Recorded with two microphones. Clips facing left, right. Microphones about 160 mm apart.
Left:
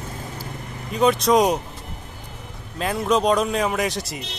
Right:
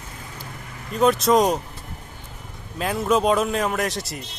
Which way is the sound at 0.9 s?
Centre (ahead or behind).